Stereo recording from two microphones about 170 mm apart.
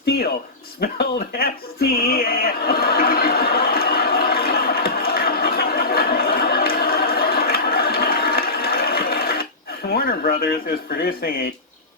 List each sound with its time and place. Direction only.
0.0 s speech: 65° left (ahead or behind)
0.8 s a sound: 65° left (ahead or behind)
9.9 s speech: 60° left (ahead or behind)